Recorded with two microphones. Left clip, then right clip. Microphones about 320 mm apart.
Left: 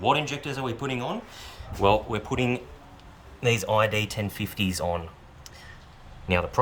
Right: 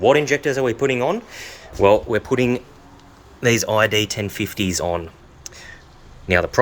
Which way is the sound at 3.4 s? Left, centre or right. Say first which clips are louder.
Right 6 dB; centre.